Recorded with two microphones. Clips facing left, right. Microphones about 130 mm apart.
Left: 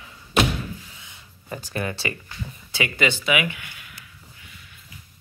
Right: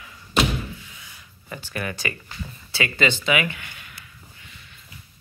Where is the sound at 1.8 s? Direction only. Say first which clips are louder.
Even; 25° left (ahead or behind).